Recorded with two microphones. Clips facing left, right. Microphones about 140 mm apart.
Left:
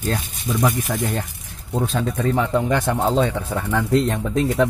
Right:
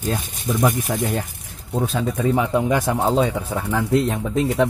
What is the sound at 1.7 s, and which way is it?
Speech, 5° right (ahead or behind).